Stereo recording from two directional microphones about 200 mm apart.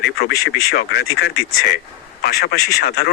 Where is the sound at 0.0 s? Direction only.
55° left (ahead or behind).